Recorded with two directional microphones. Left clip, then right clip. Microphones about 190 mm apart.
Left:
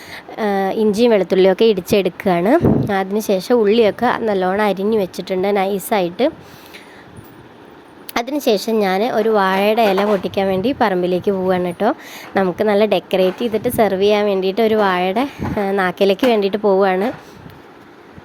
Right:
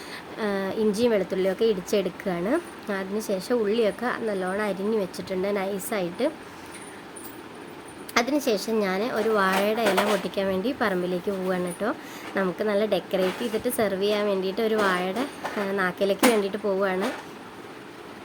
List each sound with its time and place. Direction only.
0.1 s a woman's voice: 35° left (ahead or behind)
8.1 s speech: 40° left (ahead or behind)